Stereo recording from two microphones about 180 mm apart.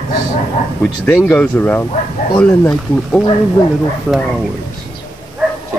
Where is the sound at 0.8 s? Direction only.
5° left (ahead or behind).